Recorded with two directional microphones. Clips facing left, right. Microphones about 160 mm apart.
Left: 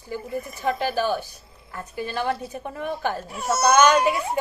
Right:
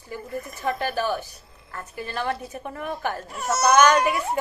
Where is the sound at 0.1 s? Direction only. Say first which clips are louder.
Left 3 dB; 20° left (ahead or behind).